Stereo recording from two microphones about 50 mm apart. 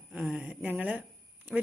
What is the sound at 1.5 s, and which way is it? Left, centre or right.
Speech, centre.